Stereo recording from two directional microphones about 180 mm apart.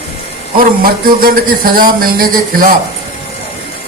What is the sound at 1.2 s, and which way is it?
Speech, 55° right (ahead or behind).